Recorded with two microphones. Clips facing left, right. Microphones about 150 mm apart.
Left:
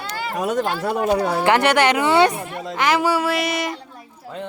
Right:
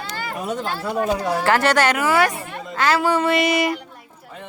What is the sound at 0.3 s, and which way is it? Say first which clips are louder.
Speech: left 5 dB; 75° left (ahead or behind).